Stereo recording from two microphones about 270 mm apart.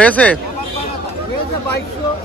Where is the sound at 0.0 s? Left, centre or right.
Centre.